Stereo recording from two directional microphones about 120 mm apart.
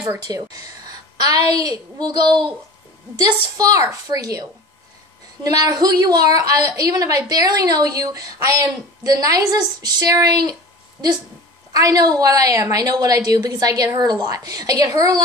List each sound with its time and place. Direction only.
0.2 s a woman's voice: 30° right (ahead or behind)
11.7 s a woman's voice: 30° right (ahead or behind)